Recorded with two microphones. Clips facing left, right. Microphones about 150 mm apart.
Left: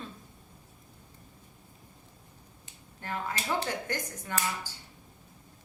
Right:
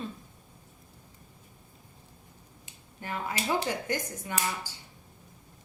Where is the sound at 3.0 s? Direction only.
15° right (ahead or behind).